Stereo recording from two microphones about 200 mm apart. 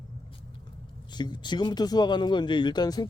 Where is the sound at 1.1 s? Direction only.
20° left (ahead or behind).